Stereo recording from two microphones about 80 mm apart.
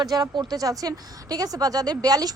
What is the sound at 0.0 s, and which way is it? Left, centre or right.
Speech, right.